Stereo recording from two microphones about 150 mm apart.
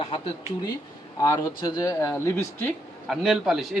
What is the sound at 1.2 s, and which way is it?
Speech, 25° left (ahead or behind).